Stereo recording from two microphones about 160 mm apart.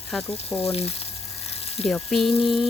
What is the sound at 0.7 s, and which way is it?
Speech, 40° left (ahead or behind).